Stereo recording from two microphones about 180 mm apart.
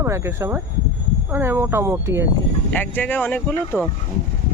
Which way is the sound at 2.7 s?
10° left (ahead or behind).